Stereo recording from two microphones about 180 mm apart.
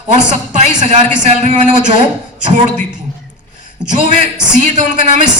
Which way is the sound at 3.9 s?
45° right (ahead or behind).